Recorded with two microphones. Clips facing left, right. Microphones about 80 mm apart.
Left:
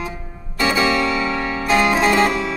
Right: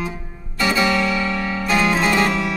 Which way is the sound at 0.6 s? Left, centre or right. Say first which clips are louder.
Left 1 dB; centre.